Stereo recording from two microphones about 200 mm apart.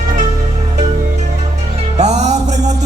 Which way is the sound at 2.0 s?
35° right (ahead or behind).